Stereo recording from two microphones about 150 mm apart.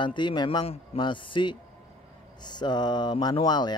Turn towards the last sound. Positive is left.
turn(degrees=30)  # may be behind; listen again after turning